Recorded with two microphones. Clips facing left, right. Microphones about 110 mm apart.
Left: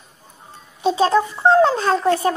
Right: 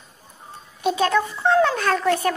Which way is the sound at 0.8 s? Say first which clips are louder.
Left 4 dB; 30° left (ahead or behind).